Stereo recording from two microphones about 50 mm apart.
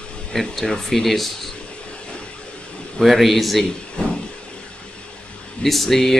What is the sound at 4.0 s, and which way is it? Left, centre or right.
Vehicle, centre.